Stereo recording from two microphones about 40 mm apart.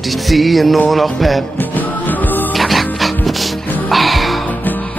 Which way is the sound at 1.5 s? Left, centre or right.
Left.